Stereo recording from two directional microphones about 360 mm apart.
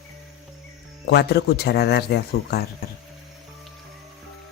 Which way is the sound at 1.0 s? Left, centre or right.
Left.